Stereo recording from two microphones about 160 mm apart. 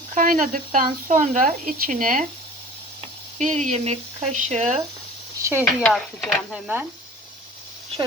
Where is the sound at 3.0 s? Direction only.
40° right (ahead or behind).